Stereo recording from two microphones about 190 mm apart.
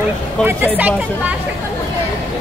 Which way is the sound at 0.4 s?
10° right (ahead or behind).